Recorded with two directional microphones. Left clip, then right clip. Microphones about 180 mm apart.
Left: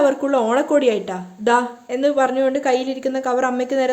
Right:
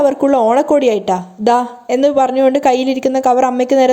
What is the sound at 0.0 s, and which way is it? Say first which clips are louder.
A woman's voice: right 5 dB; 30° right (ahead or behind).